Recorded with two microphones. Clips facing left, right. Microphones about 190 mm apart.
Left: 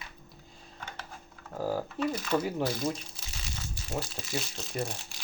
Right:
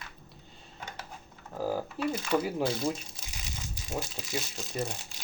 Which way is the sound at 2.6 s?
25° right (ahead or behind).